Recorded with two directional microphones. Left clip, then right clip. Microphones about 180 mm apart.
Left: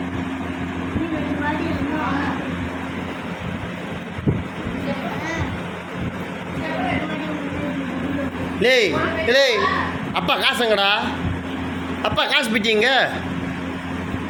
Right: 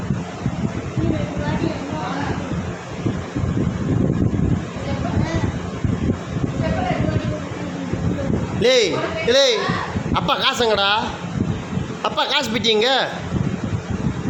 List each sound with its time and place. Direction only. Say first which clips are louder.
8.6 s speech: even; 25° right (ahead or behind)
12.0 s speech: left 1 dB; 20° right (ahead or behind)